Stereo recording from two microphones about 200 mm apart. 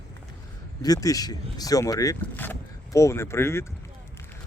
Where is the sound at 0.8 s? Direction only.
20° left (ahead or behind).